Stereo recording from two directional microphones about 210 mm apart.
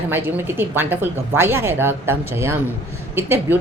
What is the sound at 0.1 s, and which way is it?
A woman's voice, 10° right (ahead or behind).